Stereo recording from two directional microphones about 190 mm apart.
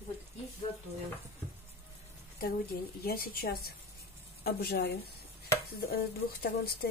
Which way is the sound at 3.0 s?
50° left (ahead or behind).